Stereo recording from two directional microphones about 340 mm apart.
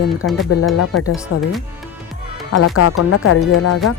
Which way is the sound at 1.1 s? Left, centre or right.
Centre.